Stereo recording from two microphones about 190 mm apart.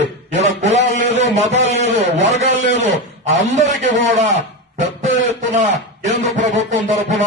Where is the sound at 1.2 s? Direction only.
40° right (ahead or behind).